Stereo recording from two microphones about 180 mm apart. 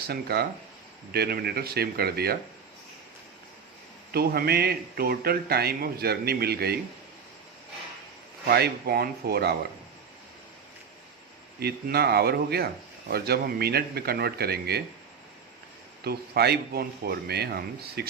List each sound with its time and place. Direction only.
0.1 s speech: 60° right (ahead or behind)
4.1 s speech: 60° right (ahead or behind)
8.4 s speech: 60° right (ahead or behind)
11.6 s speech: 60° right (ahead or behind)
16.0 s speech: 65° right (ahead or behind)